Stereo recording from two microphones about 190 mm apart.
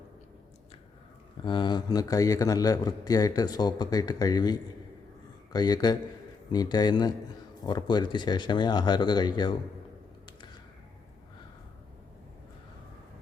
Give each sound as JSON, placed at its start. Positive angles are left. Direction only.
{"t": 1.5, "sound": "a man's voice", "side_deg": 25}